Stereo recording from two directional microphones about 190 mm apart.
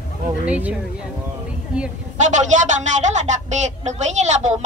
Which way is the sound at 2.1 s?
40° right (ahead or behind).